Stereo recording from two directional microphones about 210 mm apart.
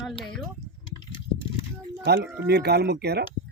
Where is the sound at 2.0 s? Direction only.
50° right (ahead or behind).